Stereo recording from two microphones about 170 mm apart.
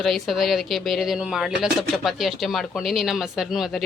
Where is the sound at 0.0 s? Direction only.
Centre (ahead or behind).